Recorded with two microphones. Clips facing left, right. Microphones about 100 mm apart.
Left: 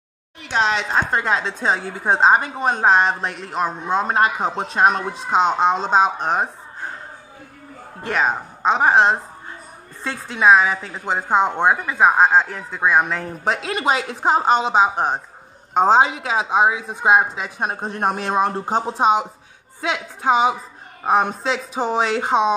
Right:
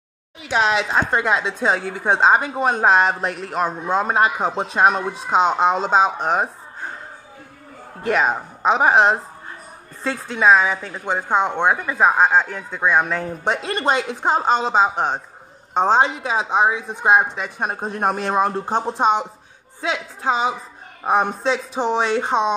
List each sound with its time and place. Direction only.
0.4 s a man's voice: 5° right (ahead or behind)
8.0 s a man's voice: centre (ahead or behind)